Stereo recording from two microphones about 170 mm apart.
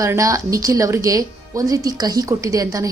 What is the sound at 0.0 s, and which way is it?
A woman's voice, 20° right (ahead or behind).